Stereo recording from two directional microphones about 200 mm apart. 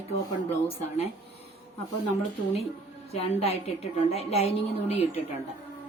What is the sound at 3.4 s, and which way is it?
A woman's voice, 30° left (ahead or behind).